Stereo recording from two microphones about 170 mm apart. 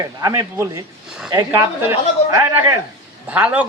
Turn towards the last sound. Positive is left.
turn(degrees=-10)  # may be behind; listen again after turning